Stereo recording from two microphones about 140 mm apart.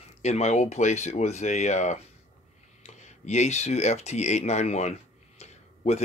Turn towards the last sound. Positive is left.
turn(degrees=50)  # may be behind; listen again after turning